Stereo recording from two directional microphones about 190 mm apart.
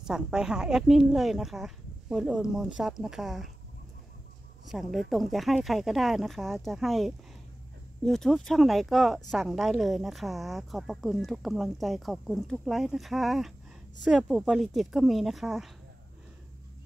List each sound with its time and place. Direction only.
0.0 s speech: 5° right (ahead or behind)
4.6 s speech: centre (ahead or behind)